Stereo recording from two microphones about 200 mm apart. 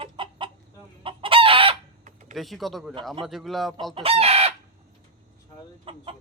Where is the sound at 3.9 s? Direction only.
30° right (ahead or behind).